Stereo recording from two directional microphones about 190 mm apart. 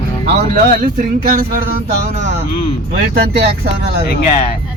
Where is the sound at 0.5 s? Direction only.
45° right (ahead or behind).